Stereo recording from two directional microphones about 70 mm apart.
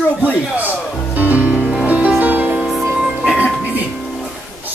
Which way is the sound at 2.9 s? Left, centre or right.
Centre.